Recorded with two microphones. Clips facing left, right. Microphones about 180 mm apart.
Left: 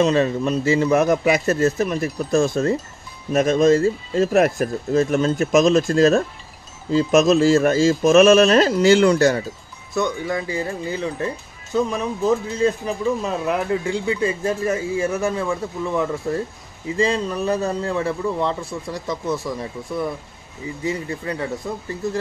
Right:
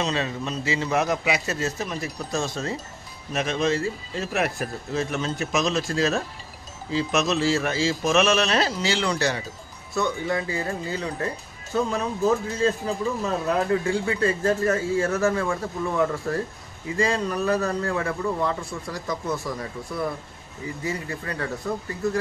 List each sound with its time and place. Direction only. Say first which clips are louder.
0.0 s speech: left 9 dB; 50° left (ahead or behind)
9.9 s speech: left 3 dB; 15° left (ahead or behind)
20.8 s speech: left 6 dB; 20° left (ahead or behind)